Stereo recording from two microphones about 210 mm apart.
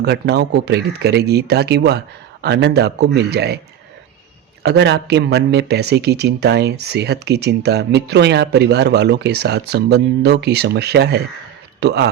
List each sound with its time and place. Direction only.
0.0 s speech: 50° right (ahead or behind)
4.6 s speech: 55° right (ahead or behind)